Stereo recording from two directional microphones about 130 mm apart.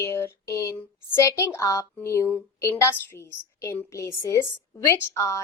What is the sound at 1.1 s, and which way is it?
A woman's voice, 20° left (ahead or behind).